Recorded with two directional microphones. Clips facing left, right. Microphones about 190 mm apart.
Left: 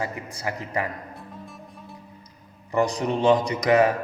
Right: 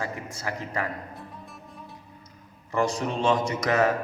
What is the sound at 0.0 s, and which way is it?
Speech, 15° left (ahead or behind).